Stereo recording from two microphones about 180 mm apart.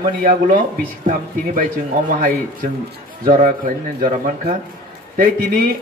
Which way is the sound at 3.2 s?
50° right (ahead or behind).